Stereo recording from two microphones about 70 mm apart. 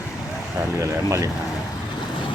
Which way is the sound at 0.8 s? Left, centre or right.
Right.